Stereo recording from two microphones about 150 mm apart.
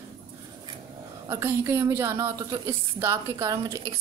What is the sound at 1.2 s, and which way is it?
A woman's voice, 15° right (ahead or behind).